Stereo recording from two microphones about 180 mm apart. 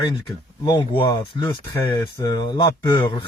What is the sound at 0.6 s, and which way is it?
A man's voice, 25° left (ahead or behind).